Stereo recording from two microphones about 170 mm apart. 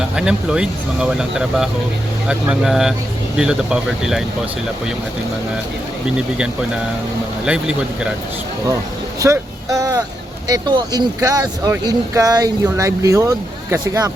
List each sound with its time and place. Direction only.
0.2 s speech: 5° right (ahead or behind)
7.4 s speech: 5° right (ahead or behind)
9.2 s speech: 20° right (ahead or behind)